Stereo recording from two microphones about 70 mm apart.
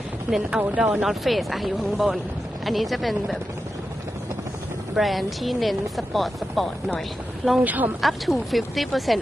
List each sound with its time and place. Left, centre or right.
0.3 s speech: centre
4.9 s speech: centre
7.6 s speech: right
8.0 s speech: centre